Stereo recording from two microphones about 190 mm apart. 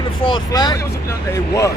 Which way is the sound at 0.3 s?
20° left (ahead or behind).